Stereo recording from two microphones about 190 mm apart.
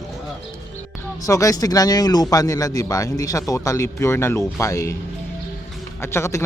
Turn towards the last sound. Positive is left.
turn(degrees=15)  # may be behind; listen again after turning